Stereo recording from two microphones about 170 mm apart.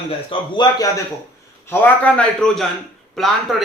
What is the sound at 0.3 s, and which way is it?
Speech, 25° left (ahead or behind).